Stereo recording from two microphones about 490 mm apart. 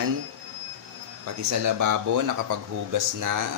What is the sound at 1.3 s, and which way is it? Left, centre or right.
Speech, right.